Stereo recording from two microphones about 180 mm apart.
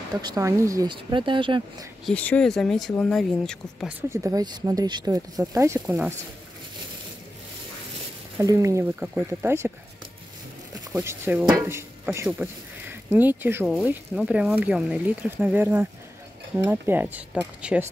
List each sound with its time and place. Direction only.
0.2 s speech: 20° right (ahead or behind)
2.0 s speech: 5° left (ahead or behind)
4.1 s speech: 20° right (ahead or behind)
8.4 s speech: 15° right (ahead or behind)
10.9 s speech: 10° right (ahead or behind)